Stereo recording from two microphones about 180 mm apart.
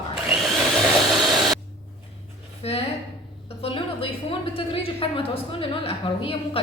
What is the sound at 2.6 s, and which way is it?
A woman's voice, 35° left (ahead or behind).